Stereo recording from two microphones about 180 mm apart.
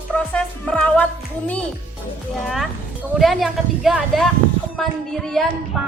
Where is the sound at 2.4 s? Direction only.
Centre (ahead or behind).